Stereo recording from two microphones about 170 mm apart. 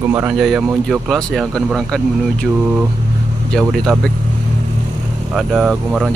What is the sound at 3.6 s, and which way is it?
Speech, centre (ahead or behind).